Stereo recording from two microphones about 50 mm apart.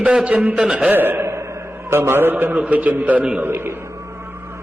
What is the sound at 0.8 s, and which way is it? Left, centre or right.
Speech, right.